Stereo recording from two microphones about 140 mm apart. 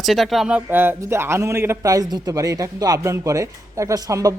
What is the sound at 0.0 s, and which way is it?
A man's voice, centre (ahead or behind).